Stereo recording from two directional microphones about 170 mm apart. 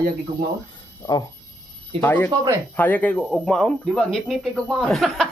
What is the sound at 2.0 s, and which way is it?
Speech, 10° left (ahead or behind).